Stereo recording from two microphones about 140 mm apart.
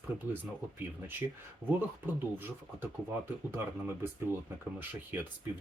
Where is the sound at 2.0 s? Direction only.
15° right (ahead or behind).